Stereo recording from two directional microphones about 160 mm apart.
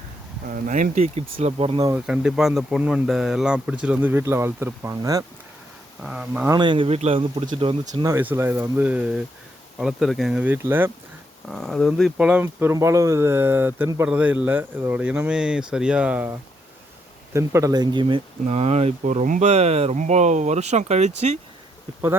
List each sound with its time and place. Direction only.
0.4 s speech: 55° right (ahead or behind); by 1.8 s 35° right (ahead or behind)
1.8 s speech: 20° right (ahead or behind)
2.0 s speech: 5° right (ahead or behind); by 5.2 s 20° right (ahead or behind)
6.0 s speech: 5° right (ahead or behind)
6.5 s speech: 30° right (ahead or behind)
8.0 s speech: 15° right (ahead or behind)
11.4 s speech: centre (ahead or behind)
17.3 s speech: 20° right (ahead or behind); by 21.1 s 45° right (ahead or behind)